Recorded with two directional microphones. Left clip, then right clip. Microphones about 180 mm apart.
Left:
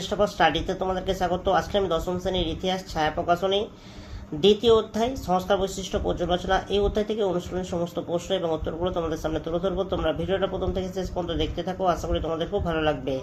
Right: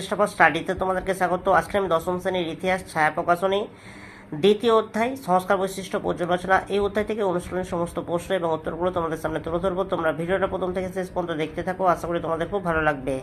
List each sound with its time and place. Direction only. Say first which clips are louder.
0.1 s speech: right 3 dB; 15° right (ahead or behind)